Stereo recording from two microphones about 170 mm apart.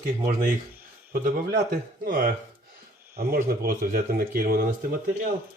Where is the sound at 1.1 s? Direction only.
55° right (ahead or behind).